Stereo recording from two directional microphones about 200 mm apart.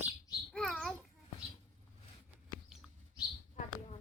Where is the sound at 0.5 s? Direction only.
Centre (ahead or behind).